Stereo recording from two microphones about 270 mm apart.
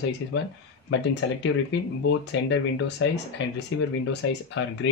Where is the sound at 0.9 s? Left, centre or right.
Left.